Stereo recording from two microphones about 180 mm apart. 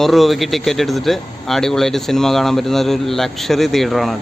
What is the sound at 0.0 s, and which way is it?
Speech, centre (ahead or behind).